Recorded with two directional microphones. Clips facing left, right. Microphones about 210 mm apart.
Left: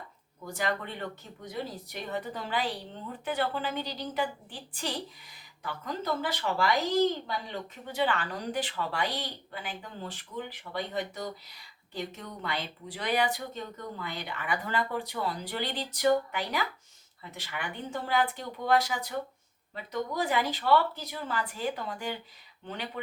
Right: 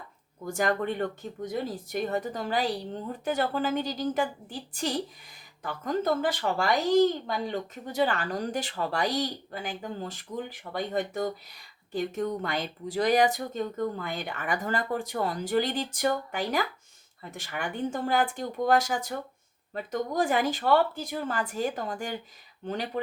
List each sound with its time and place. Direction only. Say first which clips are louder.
0.4 s speech: right 6 dB; 45° right (ahead or behind)